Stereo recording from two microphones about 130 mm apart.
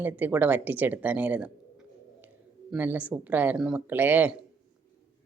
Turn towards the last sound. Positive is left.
turn(degrees=-10)  # may be behind; listen again after turning